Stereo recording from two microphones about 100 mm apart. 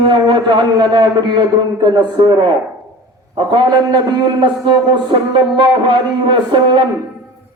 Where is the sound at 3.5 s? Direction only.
55° right (ahead or behind).